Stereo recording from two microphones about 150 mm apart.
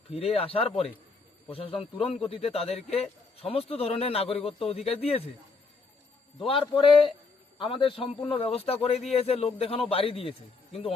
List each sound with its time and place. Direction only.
0.1 s a man's voice: 40° left (ahead or behind)
6.4 s a man's voice: 35° left (ahead or behind)